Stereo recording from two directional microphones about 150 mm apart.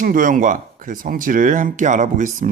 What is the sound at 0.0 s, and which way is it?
Speech, 65° right (ahead or behind).